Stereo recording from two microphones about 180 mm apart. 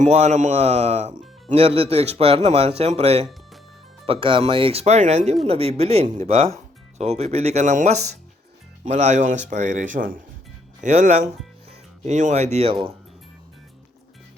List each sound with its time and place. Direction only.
0.0 s speech: 40° right (ahead or behind)